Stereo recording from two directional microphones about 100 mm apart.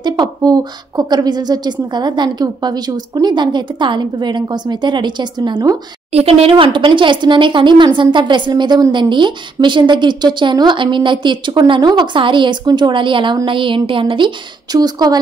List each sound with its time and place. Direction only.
0.0 s speech: 45° right (ahead or behind)
6.1 s a woman's voice: 85° right
6.5 s a woman's voice: 55° right (ahead or behind)